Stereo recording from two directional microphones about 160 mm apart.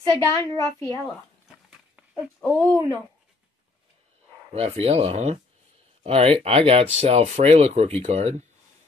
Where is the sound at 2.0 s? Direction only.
5° right (ahead or behind).